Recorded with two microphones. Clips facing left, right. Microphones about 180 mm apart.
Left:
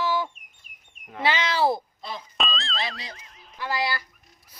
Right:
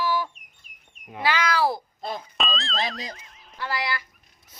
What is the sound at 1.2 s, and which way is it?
Speech, 25° left (ahead or behind).